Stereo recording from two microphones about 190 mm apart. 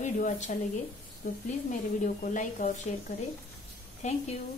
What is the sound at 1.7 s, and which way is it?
Speech, 40° left (ahead or behind).